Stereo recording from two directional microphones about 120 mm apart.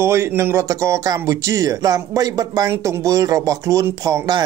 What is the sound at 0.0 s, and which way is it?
Speech, 20° right (ahead or behind).